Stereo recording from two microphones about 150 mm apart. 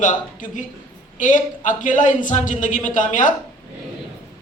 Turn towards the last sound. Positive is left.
turn(degrees=60)  # may be behind; listen again after turning